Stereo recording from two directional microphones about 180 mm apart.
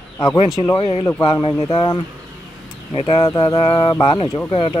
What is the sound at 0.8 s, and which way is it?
Speech, 30° left (ahead or behind).